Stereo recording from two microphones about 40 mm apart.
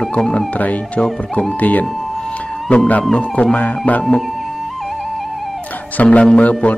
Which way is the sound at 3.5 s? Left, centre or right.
Left.